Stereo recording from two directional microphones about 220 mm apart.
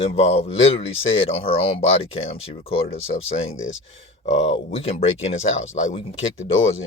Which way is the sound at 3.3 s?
65° left (ahead or behind).